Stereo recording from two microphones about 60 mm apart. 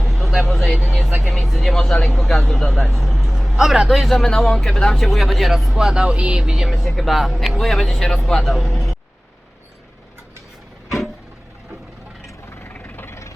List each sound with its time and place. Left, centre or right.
0.0 s a sound: centre
1.5 s speech: centre
2.7 s vehicle: centre
3.5 s speech: centre
12.5 s vehicle: left
13.1 s vehicle: left